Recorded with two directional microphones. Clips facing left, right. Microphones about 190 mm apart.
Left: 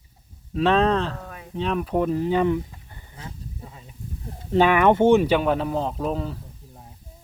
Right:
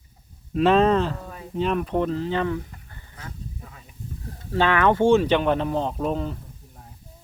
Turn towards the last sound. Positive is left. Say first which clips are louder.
# right 1 dB
turn(degrees=0)  # may be behind; listen again after turning